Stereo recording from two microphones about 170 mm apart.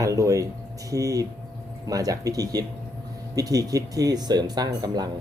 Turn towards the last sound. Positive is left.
turn(degrees=-25)  # may be behind; listen again after turning